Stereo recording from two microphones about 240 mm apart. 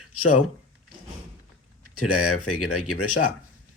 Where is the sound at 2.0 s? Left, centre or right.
Left.